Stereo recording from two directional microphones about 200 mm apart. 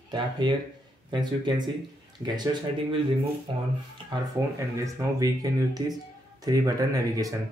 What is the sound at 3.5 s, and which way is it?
Speech, 25° right (ahead or behind).